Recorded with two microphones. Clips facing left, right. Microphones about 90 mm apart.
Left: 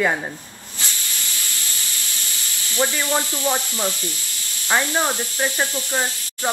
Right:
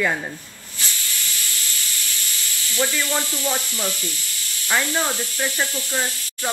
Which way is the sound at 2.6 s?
20° left (ahead or behind).